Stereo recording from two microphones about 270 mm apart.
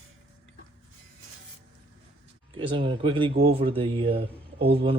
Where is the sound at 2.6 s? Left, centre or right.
Centre.